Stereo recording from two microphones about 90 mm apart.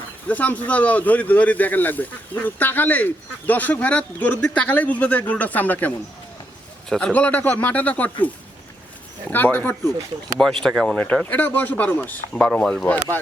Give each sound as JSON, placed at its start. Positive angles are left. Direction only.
{"t": 0.3, "sound": "speech", "side_deg": 15}
{"t": 7.0, "sound": "speech", "side_deg": 20}
{"t": 9.3, "sound": "speech", "side_deg": 20}
{"t": 10.4, "sound": "speech", "side_deg": 5}
{"t": 10.9, "sound": "speech", "side_deg": 15}
{"t": 12.3, "sound": "speech", "side_deg": 5}
{"t": 12.8, "sound": "speech", "side_deg": 25}